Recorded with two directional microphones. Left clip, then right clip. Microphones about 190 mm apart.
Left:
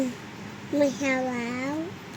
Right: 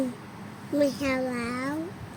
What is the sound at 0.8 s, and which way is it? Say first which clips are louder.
Speech: left 1 dB; 35° right (ahead or behind).